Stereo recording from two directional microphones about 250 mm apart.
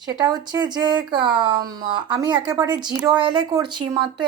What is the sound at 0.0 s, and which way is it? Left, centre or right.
Speech, centre.